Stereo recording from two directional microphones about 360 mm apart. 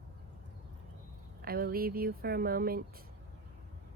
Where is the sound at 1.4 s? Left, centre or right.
Right.